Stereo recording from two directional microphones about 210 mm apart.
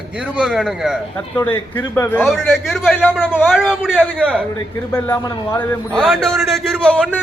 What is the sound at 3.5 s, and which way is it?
A man's voice, 5° right (ahead or behind).